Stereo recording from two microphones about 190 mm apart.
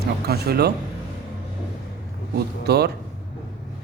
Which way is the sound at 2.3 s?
60° right (ahead or behind).